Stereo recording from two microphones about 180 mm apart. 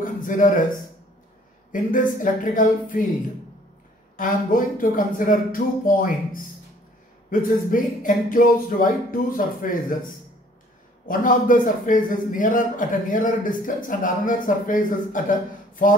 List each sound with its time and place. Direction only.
0.0 s speech: 45° left (ahead or behind)
1.7 s a man's voice: 50° left (ahead or behind)
4.2 s a man's voice: 50° left (ahead or behind)